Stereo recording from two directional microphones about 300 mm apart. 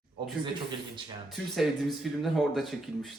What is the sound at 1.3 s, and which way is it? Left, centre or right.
Speech, centre.